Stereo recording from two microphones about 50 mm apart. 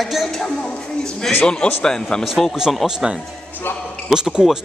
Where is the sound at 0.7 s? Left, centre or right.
Centre.